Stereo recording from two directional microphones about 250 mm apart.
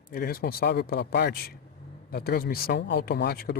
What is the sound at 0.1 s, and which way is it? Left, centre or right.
Speech, left.